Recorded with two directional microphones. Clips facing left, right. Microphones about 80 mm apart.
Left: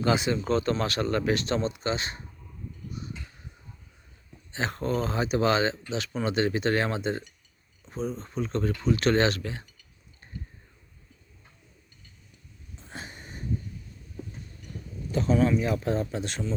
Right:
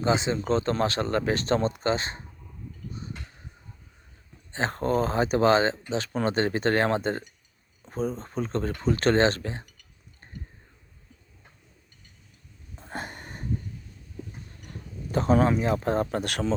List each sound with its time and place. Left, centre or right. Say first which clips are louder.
0.0 s speech: even; right
3.0 s a sound: left 1 dB; right
4.5 s speech: right 3 dB; right
12.7 s wheeze: right 6 dB; right
15.1 s speech: right 2 dB; right